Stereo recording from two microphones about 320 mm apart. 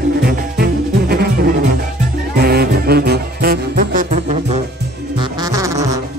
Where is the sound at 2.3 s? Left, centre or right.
Right.